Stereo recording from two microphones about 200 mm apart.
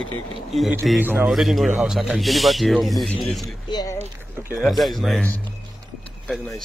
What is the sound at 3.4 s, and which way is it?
Speech, 15° left (ahead or behind).